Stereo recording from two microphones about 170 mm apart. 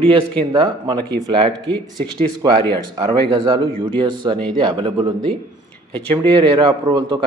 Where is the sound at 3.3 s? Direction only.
30° right (ahead or behind).